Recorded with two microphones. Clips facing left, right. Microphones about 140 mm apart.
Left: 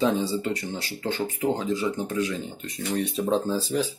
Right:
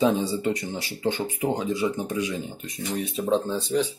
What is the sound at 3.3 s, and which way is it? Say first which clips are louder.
Speech: right 2 dB; centre (ahead or behind).